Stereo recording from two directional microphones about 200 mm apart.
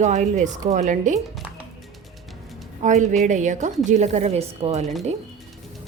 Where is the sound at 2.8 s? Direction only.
35° right (ahead or behind).